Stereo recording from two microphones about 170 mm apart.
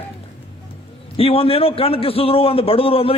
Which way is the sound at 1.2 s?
35° left (ahead or behind).